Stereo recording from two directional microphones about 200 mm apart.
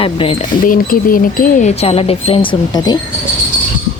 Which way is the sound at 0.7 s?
45° left (ahead or behind).